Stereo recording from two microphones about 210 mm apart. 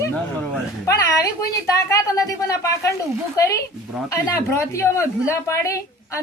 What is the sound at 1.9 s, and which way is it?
A woman's voice, 15° left (ahead or behind).